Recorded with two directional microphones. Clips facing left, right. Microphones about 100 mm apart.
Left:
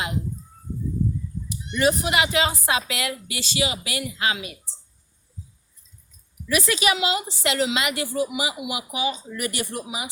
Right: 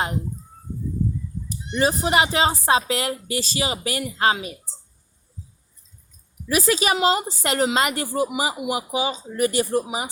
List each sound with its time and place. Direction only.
1.5 s a woman's voice: 35° right (ahead or behind)
6.5 s a woman's voice: 35° right (ahead or behind)